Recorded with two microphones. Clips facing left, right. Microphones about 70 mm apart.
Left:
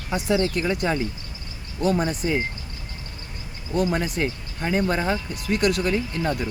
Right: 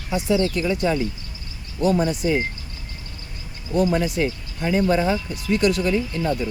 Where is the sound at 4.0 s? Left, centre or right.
Left.